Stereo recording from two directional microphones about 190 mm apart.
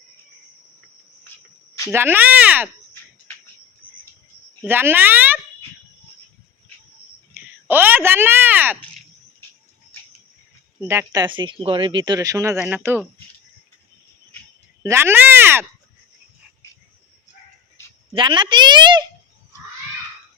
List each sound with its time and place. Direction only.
1.9 s speech: 10° right (ahead or behind)
4.6 s speech: 10° right (ahead or behind)
7.7 s speech: 10° right (ahead or behind)
10.8 s speech: 15° right (ahead or behind)
14.8 s speech: 10° right (ahead or behind)
18.1 s speech: 25° right (ahead or behind)